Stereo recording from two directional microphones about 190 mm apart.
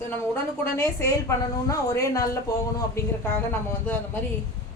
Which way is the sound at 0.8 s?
15° left (ahead or behind).